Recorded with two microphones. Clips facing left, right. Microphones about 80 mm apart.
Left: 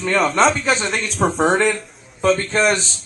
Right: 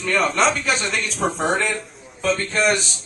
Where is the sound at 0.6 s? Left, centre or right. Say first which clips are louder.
Left 3 dB; left.